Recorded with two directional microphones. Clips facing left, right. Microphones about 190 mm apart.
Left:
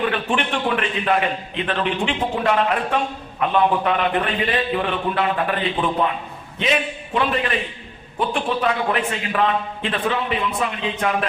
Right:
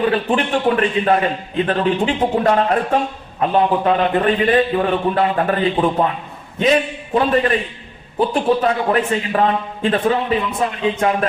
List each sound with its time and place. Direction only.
0.1 s a man's voice: 35° right (ahead or behind)
6.6 s a man's voice: 40° right (ahead or behind)